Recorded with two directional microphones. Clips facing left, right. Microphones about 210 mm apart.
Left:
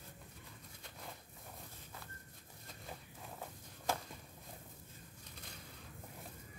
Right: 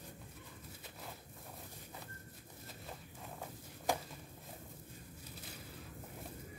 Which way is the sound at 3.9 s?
15° right (ahead or behind).